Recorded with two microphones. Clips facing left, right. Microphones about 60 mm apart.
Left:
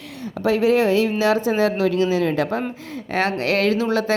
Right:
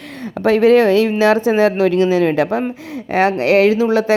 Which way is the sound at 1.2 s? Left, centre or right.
Right.